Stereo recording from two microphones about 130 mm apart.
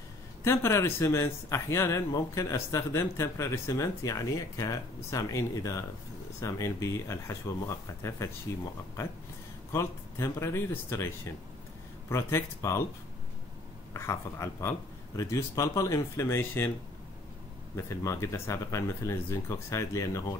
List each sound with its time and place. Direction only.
0.4 s speech: 20° left (ahead or behind)
9.7 s speech: 20° left (ahead or behind)
13.9 s speech: 20° left (ahead or behind)
17.7 s speech: 20° left (ahead or behind)